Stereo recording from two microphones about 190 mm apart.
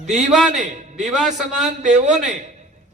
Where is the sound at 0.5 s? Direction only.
40° right (ahead or behind).